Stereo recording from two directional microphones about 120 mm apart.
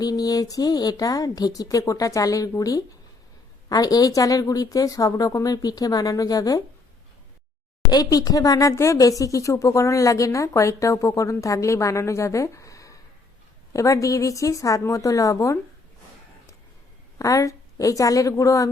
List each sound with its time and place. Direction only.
0.0 s a woman's voice: 30° left (ahead or behind)
7.9 s speech: 35° left (ahead or behind)
17.2 s speech: 25° left (ahead or behind)